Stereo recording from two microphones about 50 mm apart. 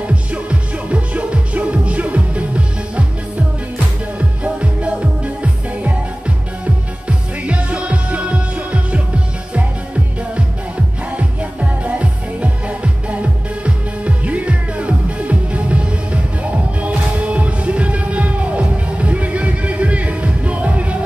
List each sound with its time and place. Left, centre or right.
0.0 s music: right
4.4 s music: right
11.1 s music: right